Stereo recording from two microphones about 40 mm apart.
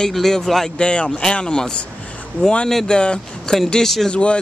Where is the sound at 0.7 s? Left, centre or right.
Left.